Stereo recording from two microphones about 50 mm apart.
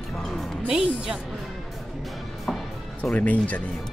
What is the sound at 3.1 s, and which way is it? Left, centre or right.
Speech, left.